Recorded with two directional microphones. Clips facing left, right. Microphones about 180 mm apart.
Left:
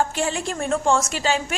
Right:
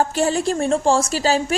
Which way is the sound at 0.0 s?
40° right (ahead or behind).